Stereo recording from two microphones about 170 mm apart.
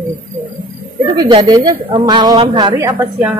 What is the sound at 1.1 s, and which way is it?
A woman's voice, 20° right (ahead or behind).